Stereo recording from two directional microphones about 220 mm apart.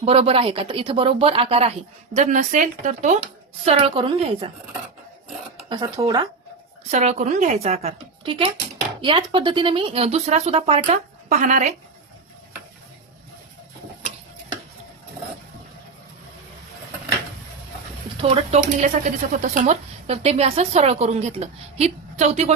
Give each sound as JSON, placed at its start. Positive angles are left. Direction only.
{"t": 0.0, "sound": "speech", "side_deg": -25}
{"t": 5.6, "sound": "speech", "side_deg": -20}
{"t": 6.9, "sound": "speech", "side_deg": -30}
{"t": 18.2, "sound": "speech", "side_deg": -30}